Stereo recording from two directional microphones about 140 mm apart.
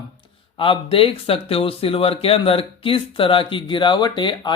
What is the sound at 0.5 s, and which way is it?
Speech, 40° left (ahead or behind).